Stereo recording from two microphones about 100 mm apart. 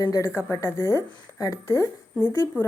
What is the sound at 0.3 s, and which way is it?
A woman's voice, 25° left (ahead or behind).